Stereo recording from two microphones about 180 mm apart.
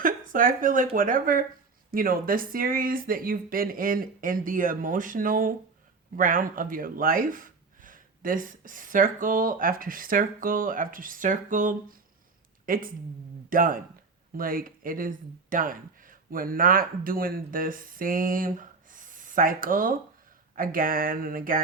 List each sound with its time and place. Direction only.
0.0 s speech: 50° right (ahead or behind)